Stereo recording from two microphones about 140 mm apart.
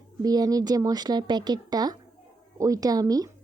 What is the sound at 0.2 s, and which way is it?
Speech, 25° right (ahead or behind).